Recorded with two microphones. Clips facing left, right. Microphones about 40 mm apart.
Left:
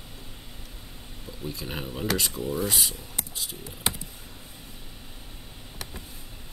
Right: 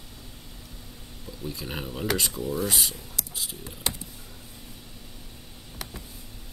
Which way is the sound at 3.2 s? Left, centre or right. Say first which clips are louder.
Left 2 dB; left.